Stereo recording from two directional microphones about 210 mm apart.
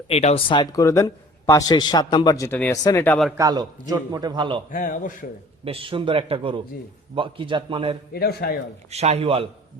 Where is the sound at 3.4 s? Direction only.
20° right (ahead or behind).